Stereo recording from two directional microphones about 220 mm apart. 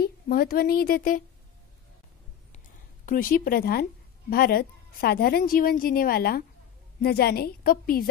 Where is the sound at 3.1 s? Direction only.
40° left (ahead or behind).